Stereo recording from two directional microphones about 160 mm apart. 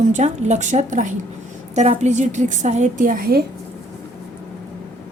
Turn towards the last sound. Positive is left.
turn(degrees=-70)  # may be behind; listen again after turning